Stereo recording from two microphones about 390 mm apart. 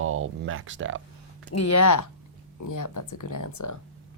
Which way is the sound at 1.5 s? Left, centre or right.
Left.